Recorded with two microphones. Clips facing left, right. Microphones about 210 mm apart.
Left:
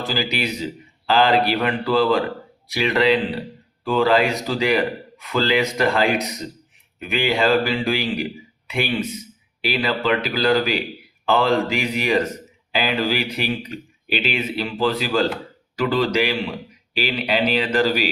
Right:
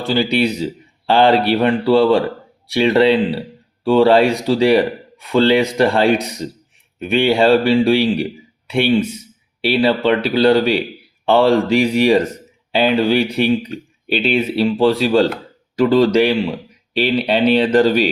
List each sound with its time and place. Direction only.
0.1 s speech: 30° right (ahead or behind)
17.0 s speech: 30° right (ahead or behind)
17.8 s speech: 10° left (ahead or behind)